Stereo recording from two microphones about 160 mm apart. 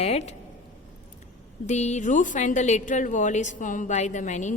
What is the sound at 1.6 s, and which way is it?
A woman's voice, 45° left (ahead or behind).